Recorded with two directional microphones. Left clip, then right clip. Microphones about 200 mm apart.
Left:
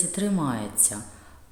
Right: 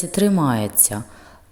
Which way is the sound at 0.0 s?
35° right (ahead or behind).